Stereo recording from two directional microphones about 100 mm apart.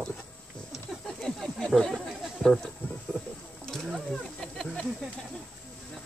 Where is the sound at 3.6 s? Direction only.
5° left (ahead or behind).